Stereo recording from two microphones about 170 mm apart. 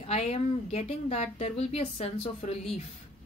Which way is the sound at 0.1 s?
40° left (ahead or behind).